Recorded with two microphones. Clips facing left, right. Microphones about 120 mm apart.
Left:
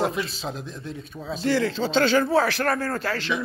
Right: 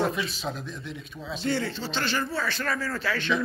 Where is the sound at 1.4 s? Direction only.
90° left; by 3.2 s 45° left (ahead or behind).